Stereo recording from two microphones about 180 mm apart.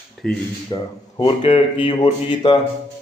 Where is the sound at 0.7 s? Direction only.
25° left (ahead or behind).